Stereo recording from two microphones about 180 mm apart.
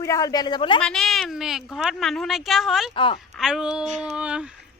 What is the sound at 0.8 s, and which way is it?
Speech, centre (ahead or behind).